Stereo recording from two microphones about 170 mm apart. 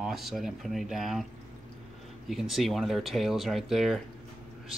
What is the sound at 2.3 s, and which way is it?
Speech, centre (ahead or behind).